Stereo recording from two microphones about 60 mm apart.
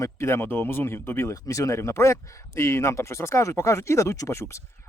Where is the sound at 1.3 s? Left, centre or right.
Left.